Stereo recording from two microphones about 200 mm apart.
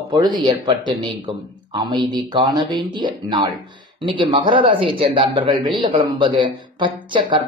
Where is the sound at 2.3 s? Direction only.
25° right (ahead or behind).